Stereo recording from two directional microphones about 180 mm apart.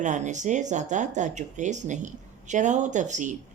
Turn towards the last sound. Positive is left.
turn(degrees=-45)  # may be behind; listen again after turning